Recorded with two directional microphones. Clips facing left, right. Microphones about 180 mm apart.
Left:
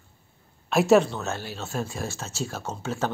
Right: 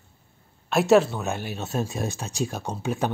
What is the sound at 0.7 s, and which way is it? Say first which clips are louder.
Speech: even; centre (ahead or behind).